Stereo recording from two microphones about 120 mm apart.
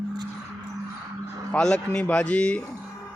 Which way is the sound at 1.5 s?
10° left (ahead or behind).